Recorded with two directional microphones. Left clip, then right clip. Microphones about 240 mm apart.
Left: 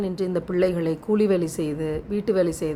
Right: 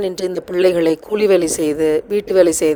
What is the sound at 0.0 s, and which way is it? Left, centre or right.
Speech, right.